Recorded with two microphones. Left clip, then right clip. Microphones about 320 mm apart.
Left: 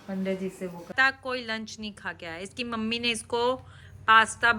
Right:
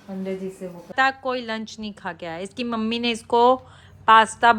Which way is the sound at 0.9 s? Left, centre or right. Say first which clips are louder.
Right 4 dB; centre.